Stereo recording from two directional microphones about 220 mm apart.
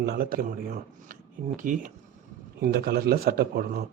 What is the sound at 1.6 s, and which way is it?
Speech, 40° right (ahead or behind).